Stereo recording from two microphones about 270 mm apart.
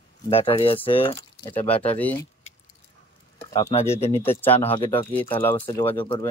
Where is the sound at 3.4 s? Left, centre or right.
Centre.